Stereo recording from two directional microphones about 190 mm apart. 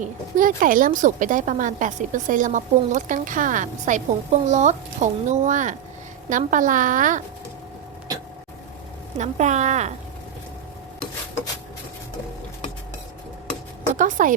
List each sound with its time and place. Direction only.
0.0 s a woman's voice: 45° right (ahead or behind)
9.1 s a woman's voice: 35° right (ahead or behind)
13.9 s a woman's voice: 45° right (ahead or behind)